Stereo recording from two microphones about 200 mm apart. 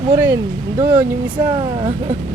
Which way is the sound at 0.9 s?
10° right (ahead or behind).